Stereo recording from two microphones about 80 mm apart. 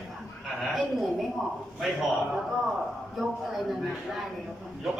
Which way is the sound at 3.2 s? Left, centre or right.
Centre.